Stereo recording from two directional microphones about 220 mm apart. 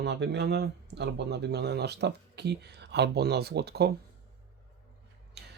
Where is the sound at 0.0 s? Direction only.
50° right (ahead or behind).